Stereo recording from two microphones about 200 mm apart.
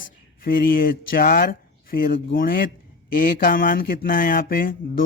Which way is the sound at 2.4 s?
45° left (ahead or behind).